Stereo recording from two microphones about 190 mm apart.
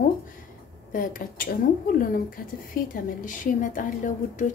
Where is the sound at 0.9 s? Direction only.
45° left (ahead or behind).